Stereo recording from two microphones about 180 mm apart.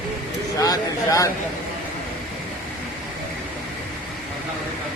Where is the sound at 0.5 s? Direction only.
20° left (ahead or behind).